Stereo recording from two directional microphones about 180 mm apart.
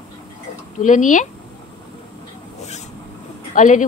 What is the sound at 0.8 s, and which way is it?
Speech, 45° left (ahead or behind).